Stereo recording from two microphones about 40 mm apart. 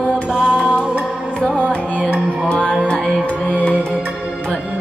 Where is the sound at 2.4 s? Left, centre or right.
Left.